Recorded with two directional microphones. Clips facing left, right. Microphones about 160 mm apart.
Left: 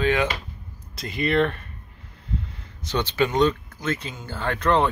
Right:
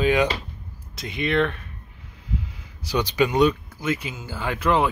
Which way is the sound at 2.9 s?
15° right (ahead or behind).